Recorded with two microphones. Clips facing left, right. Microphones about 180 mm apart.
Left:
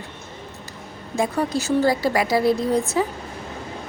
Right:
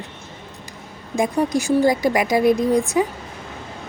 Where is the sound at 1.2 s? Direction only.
15° right (ahead or behind).